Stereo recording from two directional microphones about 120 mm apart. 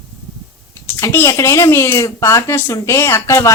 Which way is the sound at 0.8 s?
20° left (ahead or behind).